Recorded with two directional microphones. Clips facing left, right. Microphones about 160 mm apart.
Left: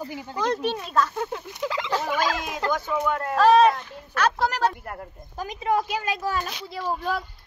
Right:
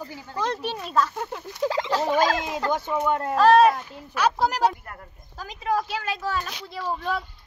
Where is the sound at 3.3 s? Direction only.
Centre (ahead or behind).